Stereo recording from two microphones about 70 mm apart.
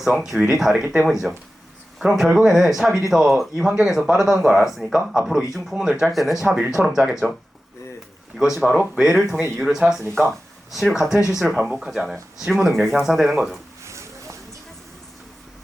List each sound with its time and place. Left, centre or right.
0.0 s speech: centre
8.4 s speech: centre
10.2 s a sound: centre
10.9 s speech: centre
13.8 s vehicle: right